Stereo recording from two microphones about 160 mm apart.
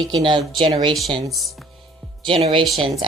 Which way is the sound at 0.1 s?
30° right (ahead or behind).